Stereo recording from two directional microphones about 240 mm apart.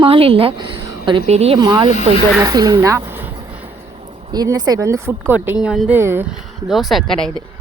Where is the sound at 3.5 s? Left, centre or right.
Centre.